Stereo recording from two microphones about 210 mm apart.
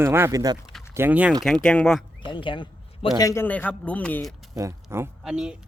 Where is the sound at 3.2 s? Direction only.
15° left (ahead or behind).